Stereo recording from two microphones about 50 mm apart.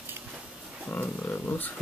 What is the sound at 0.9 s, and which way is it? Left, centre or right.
Speech, left.